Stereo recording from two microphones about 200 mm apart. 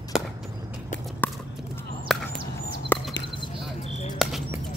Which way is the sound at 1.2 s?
10° left (ahead or behind).